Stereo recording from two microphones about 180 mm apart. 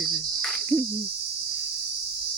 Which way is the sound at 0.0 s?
Centre (ahead or behind).